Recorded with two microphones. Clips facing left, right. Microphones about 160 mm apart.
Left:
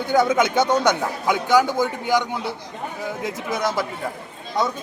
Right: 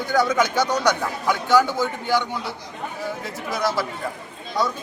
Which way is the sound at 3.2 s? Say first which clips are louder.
Left 2 dB; 20° left (ahead or behind).